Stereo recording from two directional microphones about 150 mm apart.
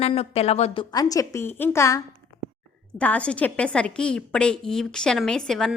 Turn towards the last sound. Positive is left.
turn(degrees=5)  # may be behind; listen again after turning